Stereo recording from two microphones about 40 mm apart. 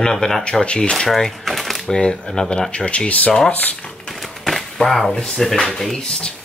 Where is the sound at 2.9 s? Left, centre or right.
Left.